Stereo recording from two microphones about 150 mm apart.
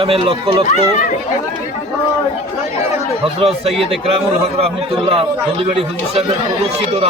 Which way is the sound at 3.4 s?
40° right (ahead or behind).